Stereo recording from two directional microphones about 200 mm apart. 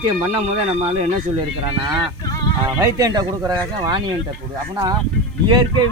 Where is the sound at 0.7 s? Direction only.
30° right (ahead or behind).